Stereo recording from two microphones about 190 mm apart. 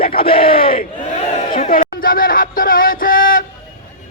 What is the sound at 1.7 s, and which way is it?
Speech, 50° left (ahead or behind).